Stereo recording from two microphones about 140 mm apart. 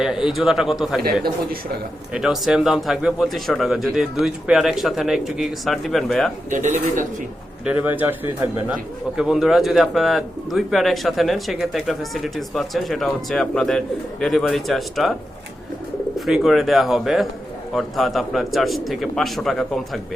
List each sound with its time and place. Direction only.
0.0 s speech: 5° right (ahead or behind)
1.0 s speech: 90° right
2.1 s speech: centre (ahead or behind)
6.5 s speech: 65° right (ahead or behind)
7.6 s speech: 10° right (ahead or behind)
9.1 s speech: 5° right (ahead or behind)
16.1 s speech: centre (ahead or behind)